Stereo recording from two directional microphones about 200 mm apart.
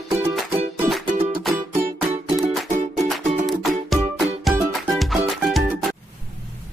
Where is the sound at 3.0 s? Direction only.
Centre (ahead or behind).